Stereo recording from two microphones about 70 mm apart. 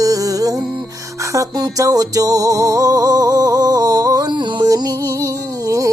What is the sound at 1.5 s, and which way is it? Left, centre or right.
Music, right.